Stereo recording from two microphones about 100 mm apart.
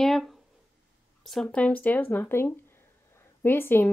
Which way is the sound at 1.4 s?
15° left (ahead or behind).